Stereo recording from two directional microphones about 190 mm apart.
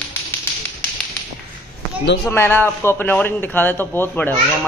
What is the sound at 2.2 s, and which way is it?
Speech, 10° left (ahead or behind).